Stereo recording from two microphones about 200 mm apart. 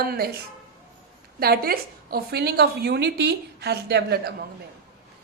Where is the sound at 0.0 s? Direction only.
50° right (ahead or behind).